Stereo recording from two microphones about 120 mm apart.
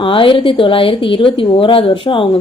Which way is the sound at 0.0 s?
45° left (ahead or behind).